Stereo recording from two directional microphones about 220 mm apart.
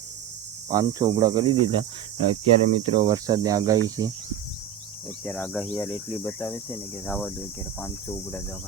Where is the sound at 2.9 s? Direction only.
20° right (ahead or behind).